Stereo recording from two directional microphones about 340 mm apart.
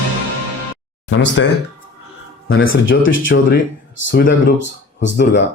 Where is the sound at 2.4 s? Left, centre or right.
Left.